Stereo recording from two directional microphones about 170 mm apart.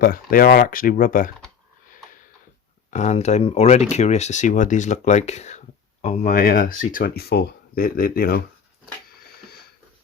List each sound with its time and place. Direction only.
0.0 s speech: 60° left (ahead or behind)
2.9 s speech: 45° left (ahead or behind); by 8.4 s 60° left (ahead or behind)